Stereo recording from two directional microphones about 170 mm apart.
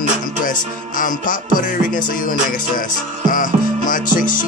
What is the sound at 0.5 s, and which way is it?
Music, 50° left (ahead or behind).